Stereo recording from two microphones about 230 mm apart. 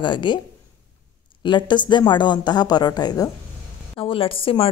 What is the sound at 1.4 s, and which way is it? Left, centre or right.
Speech, centre.